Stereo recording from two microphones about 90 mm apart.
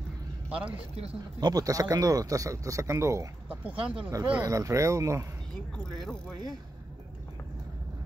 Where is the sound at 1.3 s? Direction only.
45° right (ahead or behind).